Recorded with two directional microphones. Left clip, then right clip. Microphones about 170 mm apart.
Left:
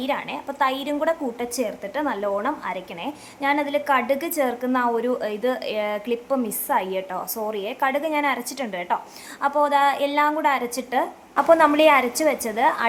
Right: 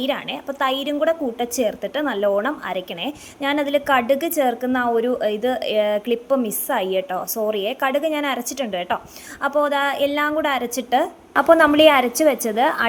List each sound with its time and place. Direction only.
0.0 s a woman's voice: 15° right (ahead or behind)